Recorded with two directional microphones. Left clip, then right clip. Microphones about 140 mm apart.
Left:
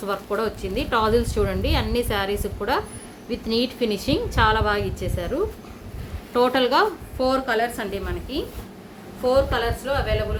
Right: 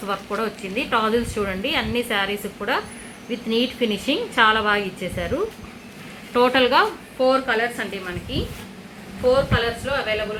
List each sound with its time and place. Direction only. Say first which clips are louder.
0.0 s a woman's voice: even; 15° left (ahead or behind)
4.4 s a woman's voice: right 2 dB; 5° right (ahead or behind)
6.3 s a woman's voice: right 2 dB; 15° left (ahead or behind)
7.2 s a woman's voice: right 3 dB; 30° left (ahead or behind)